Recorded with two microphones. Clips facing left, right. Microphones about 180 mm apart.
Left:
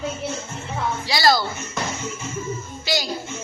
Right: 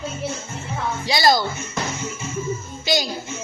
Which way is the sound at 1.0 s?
20° right (ahead or behind).